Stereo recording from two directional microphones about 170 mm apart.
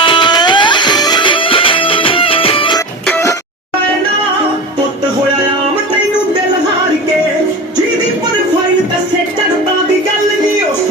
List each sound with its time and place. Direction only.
0.0 s music: 30° left (ahead or behind)
3.1 s music: 15° left (ahead or behind)